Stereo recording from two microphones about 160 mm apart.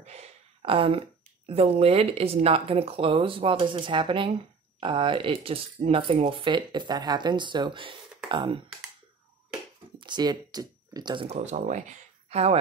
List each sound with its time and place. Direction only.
0.0 s speech: 40° right (ahead or behind)
9.9 s speech: 30° right (ahead or behind)
11.2 s speech: 45° right (ahead or behind)